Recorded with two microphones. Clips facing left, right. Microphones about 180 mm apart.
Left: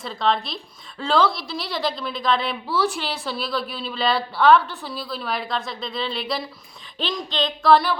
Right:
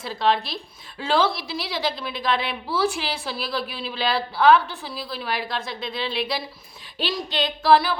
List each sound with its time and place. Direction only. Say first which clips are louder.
0.0 s a woman's voice: right 1 dB; 5° right (ahead or behind)